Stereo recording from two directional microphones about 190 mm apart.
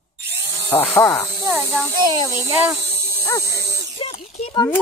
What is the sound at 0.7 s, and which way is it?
Speech, 15° left (ahead or behind).